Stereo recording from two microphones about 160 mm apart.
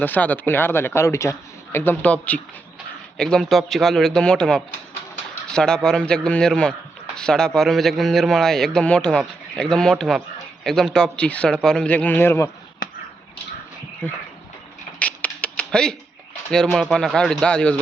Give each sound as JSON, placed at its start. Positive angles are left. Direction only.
{"t": 0.0, "sound": "a man's voice", "side_deg": 10}
{"t": 3.2, "sound": "a man's voice", "side_deg": 5}
{"t": 14.0, "sound": "a man's voice", "side_deg": 10}
{"t": 14.9, "sound": "a sound", "side_deg": 10}
{"t": 16.7, "sound": "a man's voice", "side_deg": 0}